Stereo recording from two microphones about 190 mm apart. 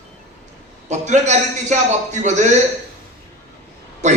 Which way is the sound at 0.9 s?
35° right (ahead or behind).